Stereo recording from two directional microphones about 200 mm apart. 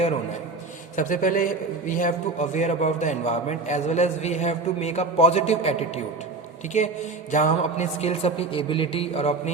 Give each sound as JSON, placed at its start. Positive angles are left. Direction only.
{"t": 0.9, "sound": "a man's voice", "side_deg": 40}
{"t": 6.7, "sound": "a man's voice", "side_deg": 35}